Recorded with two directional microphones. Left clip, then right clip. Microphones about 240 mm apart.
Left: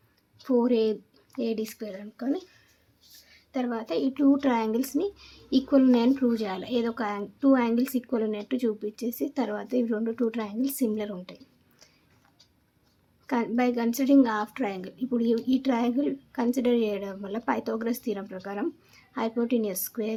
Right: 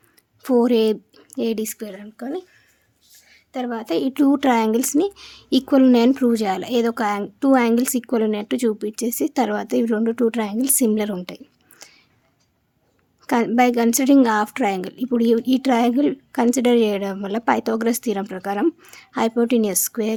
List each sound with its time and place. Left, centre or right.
0.4 s a woman's voice: right
13.2 s a woman's voice: right